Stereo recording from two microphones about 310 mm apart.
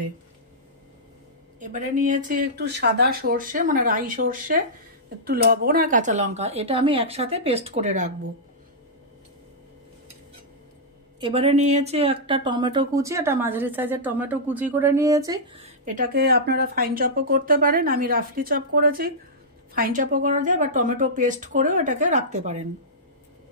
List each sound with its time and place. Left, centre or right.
1.6 s speech: right
11.1 s speech: centre